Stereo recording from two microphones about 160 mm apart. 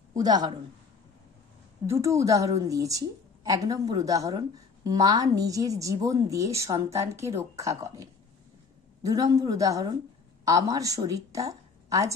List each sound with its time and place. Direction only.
0.1 s a woman's voice: 25° right (ahead or behind)
2.0 s a woman's voice: 20° right (ahead or behind)